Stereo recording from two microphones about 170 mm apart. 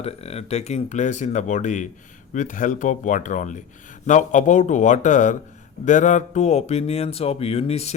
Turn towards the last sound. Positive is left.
turn(degrees=40)  # may be behind; listen again after turning